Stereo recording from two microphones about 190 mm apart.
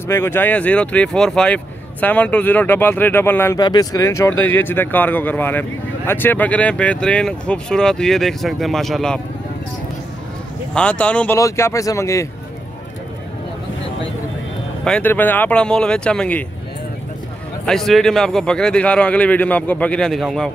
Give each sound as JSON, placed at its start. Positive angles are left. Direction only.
{"t": 0.1, "sound": "speech", "side_deg": 10}
{"t": 10.7, "sound": "speech", "side_deg": 5}
{"t": 14.9, "sound": "speech", "side_deg": 10}
{"t": 17.6, "sound": "speech", "side_deg": 0}